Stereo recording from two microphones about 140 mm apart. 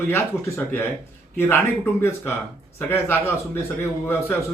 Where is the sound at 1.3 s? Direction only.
15° left (ahead or behind).